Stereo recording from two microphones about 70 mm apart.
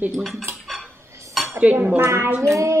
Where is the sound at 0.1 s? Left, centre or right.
Centre.